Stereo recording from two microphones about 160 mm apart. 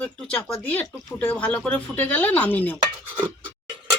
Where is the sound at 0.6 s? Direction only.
10° left (ahead or behind).